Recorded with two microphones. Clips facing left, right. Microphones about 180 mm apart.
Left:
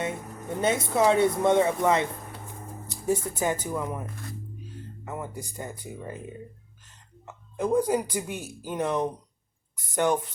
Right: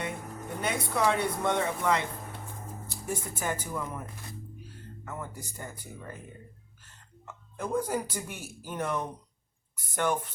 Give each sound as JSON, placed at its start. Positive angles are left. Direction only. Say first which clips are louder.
{"t": 0.6, "sound": "speech", "louder": "left 5 dB", "side_deg": 25}
{"t": 5.0, "sound": "speech", "louder": "left 4 dB", "side_deg": 15}
{"t": 7.3, "sound": "speech", "louder": "left 7 dB", "side_deg": 15}